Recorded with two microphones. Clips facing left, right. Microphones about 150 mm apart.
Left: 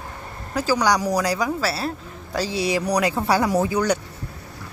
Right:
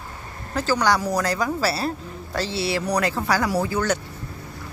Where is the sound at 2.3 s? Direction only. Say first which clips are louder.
Left 2 dB; 10° left (ahead or behind).